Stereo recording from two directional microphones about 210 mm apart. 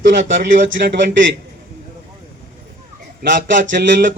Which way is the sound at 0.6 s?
55° right (ahead or behind).